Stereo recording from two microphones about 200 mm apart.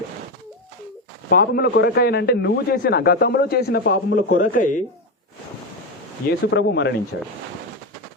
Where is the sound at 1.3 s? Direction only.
50° left (ahead or behind).